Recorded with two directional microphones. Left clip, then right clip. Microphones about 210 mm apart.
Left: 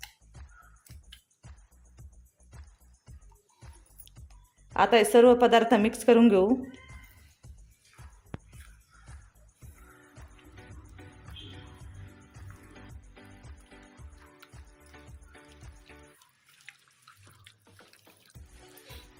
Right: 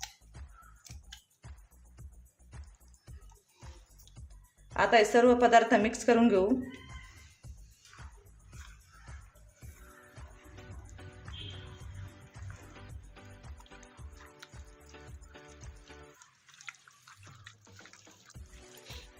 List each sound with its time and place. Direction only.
4.7 s a woman's voice: 30° left (ahead or behind)